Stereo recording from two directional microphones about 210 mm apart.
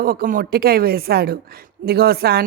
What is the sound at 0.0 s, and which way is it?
Speech, 45° right (ahead or behind).